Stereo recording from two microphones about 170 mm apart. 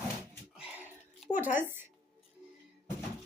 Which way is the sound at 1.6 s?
15° right (ahead or behind).